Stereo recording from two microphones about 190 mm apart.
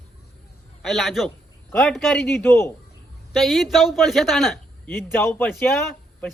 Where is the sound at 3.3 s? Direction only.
Centre (ahead or behind).